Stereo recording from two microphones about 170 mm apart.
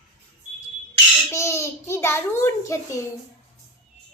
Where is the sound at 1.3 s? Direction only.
15° left (ahead or behind).